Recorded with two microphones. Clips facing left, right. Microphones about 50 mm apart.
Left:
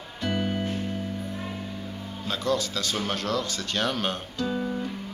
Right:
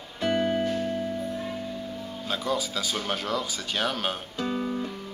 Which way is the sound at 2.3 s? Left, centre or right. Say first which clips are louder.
Left 2 dB; centre.